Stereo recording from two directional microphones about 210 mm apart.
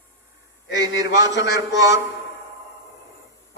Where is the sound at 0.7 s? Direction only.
20° right (ahead or behind).